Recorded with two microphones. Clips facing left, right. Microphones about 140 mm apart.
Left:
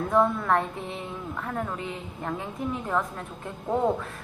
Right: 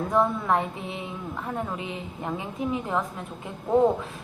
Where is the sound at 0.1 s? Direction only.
5° right (ahead or behind).